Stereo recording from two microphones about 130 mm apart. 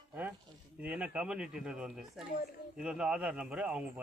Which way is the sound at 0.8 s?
10° right (ahead or behind).